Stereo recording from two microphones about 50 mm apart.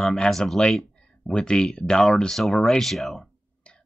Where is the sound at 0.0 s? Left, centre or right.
Centre.